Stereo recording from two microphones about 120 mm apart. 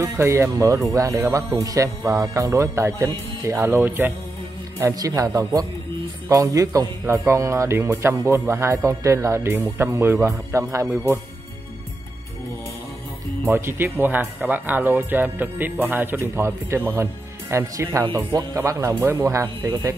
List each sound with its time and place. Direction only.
0.0 s speech: 25° right (ahead or behind)
13.5 s speech: 20° right (ahead or behind)